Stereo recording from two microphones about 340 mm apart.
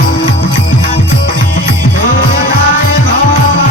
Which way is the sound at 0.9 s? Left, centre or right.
Left.